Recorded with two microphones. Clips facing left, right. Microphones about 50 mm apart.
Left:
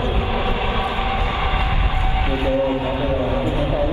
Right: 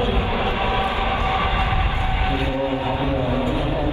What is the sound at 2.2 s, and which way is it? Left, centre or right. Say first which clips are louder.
Speech: left 5 dB; left.